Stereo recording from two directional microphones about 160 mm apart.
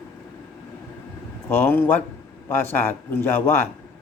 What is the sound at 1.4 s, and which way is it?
A man's voice, 15° left (ahead or behind).